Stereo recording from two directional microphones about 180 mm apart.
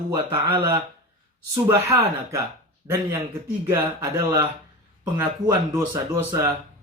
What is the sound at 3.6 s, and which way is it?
Speech, 15° right (ahead or behind).